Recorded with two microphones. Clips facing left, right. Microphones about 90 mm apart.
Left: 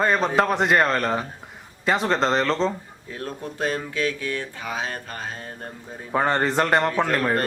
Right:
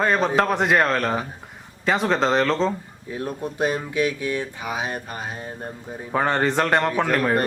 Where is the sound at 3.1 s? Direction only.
15° right (ahead or behind).